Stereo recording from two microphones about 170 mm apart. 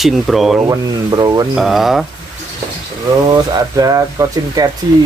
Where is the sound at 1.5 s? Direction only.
Centre (ahead or behind).